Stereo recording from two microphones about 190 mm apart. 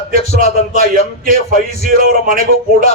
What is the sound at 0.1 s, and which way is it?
A man's voice, 50° right (ahead or behind).